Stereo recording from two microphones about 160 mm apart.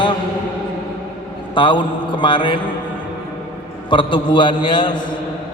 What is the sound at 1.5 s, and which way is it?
Speech, 30° left (ahead or behind).